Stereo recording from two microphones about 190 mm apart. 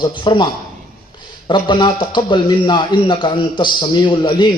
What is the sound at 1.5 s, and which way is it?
A man's voice, 25° left (ahead or behind).